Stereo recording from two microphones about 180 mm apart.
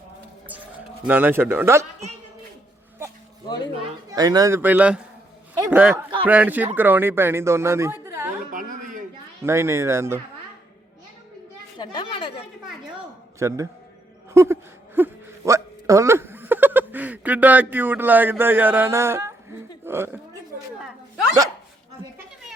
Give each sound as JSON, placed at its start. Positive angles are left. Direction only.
{"t": 1.0, "sound": "speech", "side_deg": -10}
{"t": 4.1, "sound": "speech", "side_deg": -20}
{"t": 8.5, "sound": "a sound", "side_deg": -45}
{"t": 9.4, "sound": "speech", "side_deg": -15}
{"t": 11.8, "sound": "chatter", "side_deg": 30}
{"t": 13.4, "sound": "speech", "side_deg": -15}
{"t": 14.3, "sound": "a sound", "side_deg": -15}